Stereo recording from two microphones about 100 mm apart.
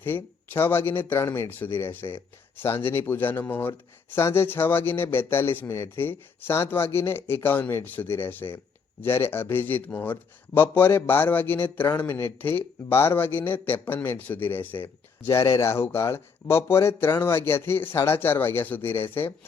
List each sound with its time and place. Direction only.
0.0 s speech: 20° left (ahead or behind)